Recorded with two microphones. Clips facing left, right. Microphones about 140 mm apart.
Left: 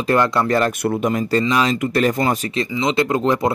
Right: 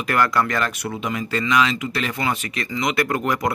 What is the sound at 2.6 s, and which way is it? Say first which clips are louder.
Speech: left 4 dB; 25° left (ahead or behind).